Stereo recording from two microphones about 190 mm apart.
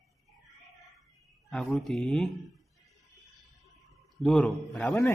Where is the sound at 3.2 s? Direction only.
Centre (ahead or behind).